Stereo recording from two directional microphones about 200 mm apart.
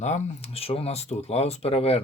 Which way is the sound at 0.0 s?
30° left (ahead or behind).